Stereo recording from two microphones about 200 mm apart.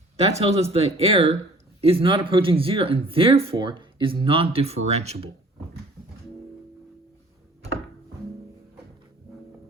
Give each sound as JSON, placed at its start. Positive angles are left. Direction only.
{"t": 0.2, "sound": "speech", "side_deg": -30}